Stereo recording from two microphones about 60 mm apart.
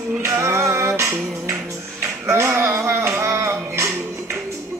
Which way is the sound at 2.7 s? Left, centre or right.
Right.